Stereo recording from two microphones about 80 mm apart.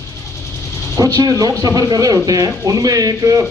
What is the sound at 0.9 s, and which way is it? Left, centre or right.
Speech, right.